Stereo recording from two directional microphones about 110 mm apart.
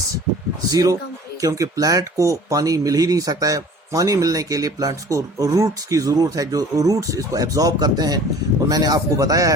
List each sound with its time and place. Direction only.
0.7 s speech: 35° right (ahead or behind)